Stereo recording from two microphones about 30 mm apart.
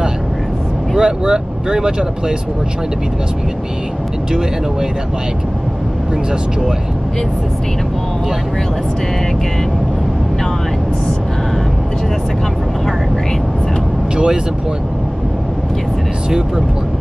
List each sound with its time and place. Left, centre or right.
0.9 s speech: right
14.1 s speech: right
16.3 s speech: centre